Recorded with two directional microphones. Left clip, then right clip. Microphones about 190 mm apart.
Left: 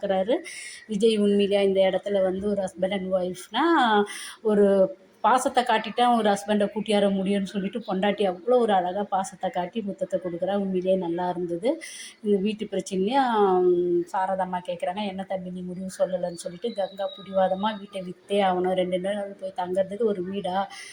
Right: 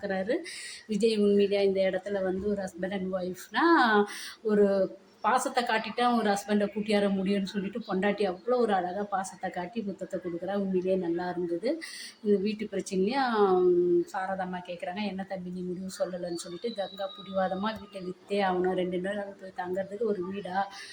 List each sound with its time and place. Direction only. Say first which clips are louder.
0.0 s a woman's voice: left 6 dB; 15° left (ahead or behind)
16.4 s a woman's voice: left 5 dB; 15° left (ahead or behind)